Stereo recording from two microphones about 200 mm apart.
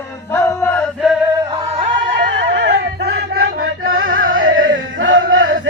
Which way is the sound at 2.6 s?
60° right (ahead or behind).